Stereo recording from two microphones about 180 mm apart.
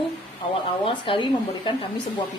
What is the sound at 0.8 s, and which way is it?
Speech, 30° left (ahead or behind).